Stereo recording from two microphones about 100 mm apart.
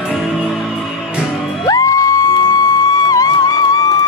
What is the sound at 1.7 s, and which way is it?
Music, 35° left (ahead or behind).